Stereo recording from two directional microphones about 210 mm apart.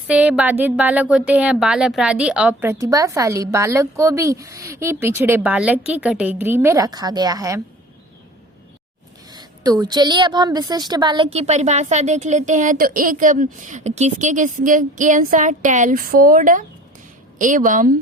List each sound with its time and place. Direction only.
0.1 s a woman's voice: 5° right (ahead or behind)
9.3 s a woman's voice: 20° right (ahead or behind); by 17.9 s 40° right (ahead or behind)